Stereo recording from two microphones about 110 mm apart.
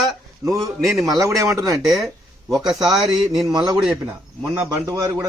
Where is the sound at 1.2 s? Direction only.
30° right (ahead or behind).